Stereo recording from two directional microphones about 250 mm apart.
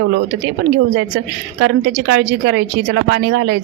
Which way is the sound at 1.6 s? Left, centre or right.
Right.